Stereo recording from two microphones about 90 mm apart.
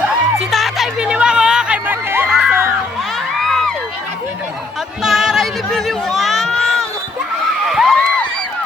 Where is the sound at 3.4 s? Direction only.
5° left (ahead or behind).